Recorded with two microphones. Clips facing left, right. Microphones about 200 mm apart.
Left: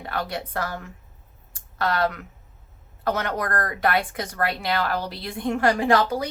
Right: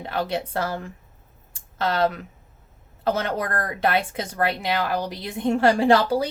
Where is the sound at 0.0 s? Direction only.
25° right (ahead or behind).